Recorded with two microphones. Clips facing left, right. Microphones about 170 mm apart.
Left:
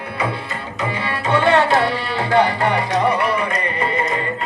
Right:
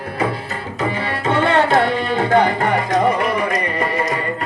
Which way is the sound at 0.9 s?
45° right (ahead or behind).